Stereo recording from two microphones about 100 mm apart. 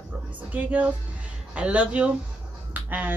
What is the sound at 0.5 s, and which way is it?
Speech, 15° right (ahead or behind).